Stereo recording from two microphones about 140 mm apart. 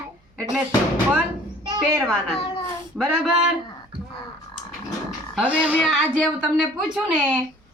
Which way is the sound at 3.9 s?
40° right (ahead or behind).